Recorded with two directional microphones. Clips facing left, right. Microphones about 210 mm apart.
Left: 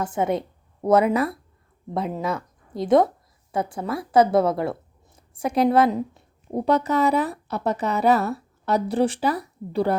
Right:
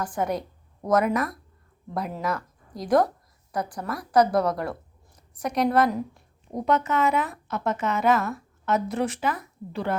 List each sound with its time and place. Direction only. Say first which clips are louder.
0.0 s a woman's voice: left 4 dB; 25° left (ahead or behind)